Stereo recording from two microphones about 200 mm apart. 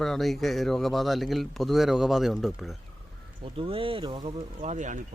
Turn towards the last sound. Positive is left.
turn(degrees=-40)  # may be behind; listen again after turning